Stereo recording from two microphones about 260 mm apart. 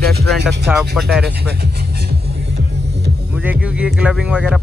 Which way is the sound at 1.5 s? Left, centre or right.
Right.